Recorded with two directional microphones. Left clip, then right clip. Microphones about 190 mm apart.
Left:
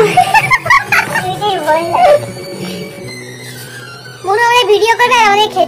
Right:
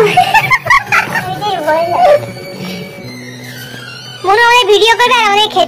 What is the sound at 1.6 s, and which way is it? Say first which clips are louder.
Speech: right 3 dB; 25° left (ahead or behind).